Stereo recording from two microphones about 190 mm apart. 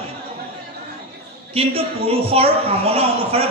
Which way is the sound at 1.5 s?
30° right (ahead or behind).